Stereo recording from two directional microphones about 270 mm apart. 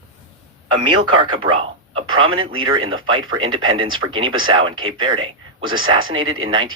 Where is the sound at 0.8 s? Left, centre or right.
Centre.